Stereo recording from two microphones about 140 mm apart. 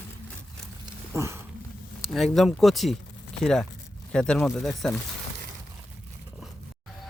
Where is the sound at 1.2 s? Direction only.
20° right (ahead or behind).